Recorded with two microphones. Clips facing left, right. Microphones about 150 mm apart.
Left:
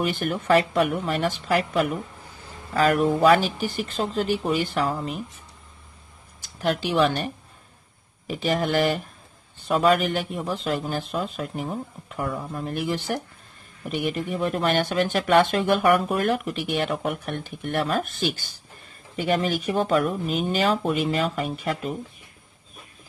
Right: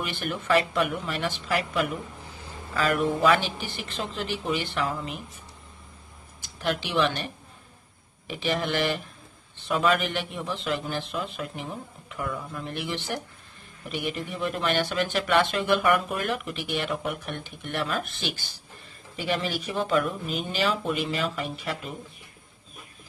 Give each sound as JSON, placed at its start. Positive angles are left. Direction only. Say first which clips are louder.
{"t": 0.0, "sound": "speech", "louder": "left 6 dB", "side_deg": 45}
{"t": 6.6, "sound": "speech", "louder": "left 4 dB", "side_deg": 45}
{"t": 8.3, "sound": "speech", "louder": "left 4 dB", "side_deg": 40}